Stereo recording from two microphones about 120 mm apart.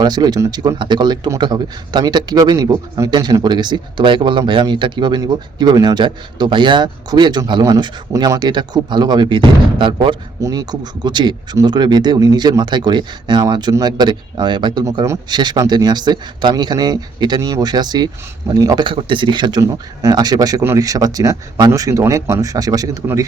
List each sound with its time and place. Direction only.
0.0 s speech: 35° right (ahead or behind)
18.9 s speech: 45° right (ahead or behind)